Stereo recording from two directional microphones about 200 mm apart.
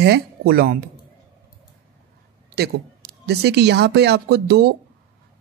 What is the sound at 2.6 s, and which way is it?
Speech, 55° right (ahead or behind).